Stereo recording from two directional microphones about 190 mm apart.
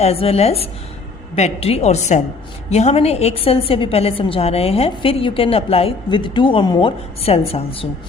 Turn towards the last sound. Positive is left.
turn(degrees=30)  # may be behind; listen again after turning